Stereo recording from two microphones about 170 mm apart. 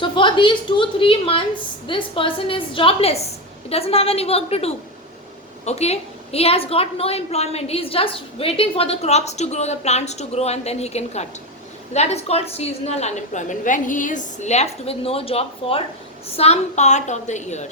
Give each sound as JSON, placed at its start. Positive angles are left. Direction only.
{"t": 0.0, "sound": "a woman's voice", "side_deg": 30}